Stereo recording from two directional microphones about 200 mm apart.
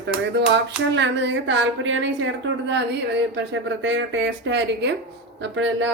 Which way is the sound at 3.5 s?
65° right (ahead or behind).